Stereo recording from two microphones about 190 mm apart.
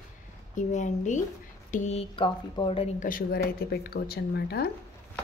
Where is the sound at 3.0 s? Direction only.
50° left (ahead or behind).